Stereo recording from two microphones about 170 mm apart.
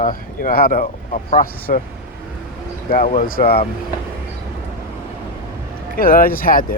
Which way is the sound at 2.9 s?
55° left (ahead or behind).